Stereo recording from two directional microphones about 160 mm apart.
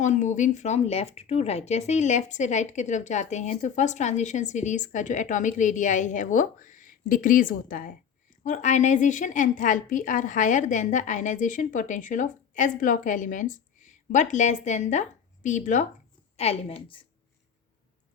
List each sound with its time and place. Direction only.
0.0 s speech: 50° left (ahead or behind)
16.4 s a woman's voice: 40° left (ahead or behind)